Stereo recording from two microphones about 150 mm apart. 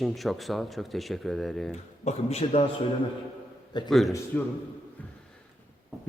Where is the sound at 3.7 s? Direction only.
30° left (ahead or behind).